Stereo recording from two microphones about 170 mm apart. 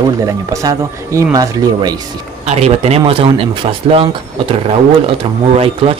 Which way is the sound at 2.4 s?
40° right (ahead or behind).